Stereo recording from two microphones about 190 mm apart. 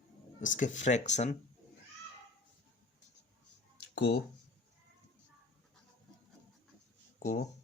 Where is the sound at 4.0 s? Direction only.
60° left (ahead or behind).